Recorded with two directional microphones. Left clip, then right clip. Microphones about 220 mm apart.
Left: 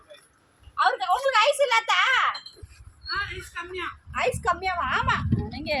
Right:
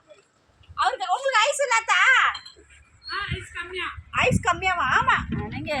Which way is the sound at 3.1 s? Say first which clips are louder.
Even; 45° left (ahead or behind).